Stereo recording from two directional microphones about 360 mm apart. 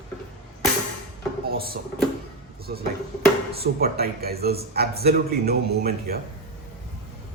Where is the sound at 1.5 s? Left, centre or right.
Right.